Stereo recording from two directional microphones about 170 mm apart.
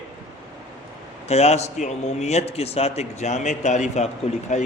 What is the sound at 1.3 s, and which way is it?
A man's voice, 40° left (ahead or behind).